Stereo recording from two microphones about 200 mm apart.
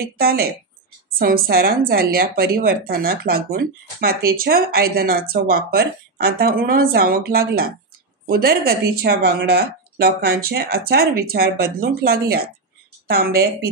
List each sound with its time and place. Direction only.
0.0 s speech: 50° right (ahead or behind)